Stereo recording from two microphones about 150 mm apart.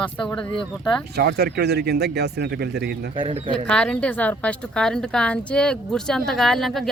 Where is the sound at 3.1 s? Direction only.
30° right (ahead or behind).